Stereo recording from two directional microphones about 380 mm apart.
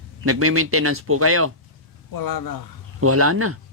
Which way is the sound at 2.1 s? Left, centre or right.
Left.